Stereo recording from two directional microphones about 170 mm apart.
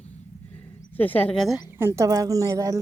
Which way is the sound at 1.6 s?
15° right (ahead or behind).